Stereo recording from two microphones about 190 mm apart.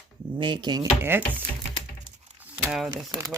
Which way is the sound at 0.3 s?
25° right (ahead or behind).